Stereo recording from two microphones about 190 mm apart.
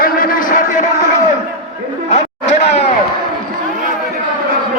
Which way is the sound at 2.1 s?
35° left (ahead or behind).